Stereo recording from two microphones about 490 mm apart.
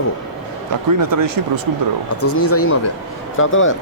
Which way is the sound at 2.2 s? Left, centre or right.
Left.